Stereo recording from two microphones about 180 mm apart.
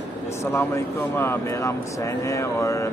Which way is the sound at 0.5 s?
15° left (ahead or behind).